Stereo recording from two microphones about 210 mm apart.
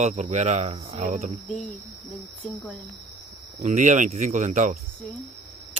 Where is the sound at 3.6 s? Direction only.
35° right (ahead or behind).